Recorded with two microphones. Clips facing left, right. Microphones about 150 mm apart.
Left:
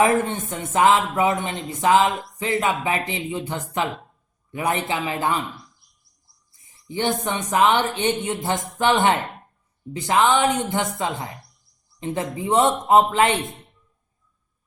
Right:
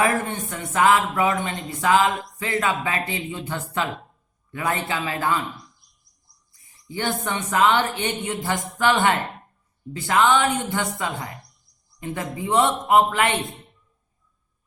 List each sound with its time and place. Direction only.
0.0 s speech: 20° left (ahead or behind)
6.6 s a sound: 20° left (ahead or behind)
7.3 s speech: 20° left (ahead or behind)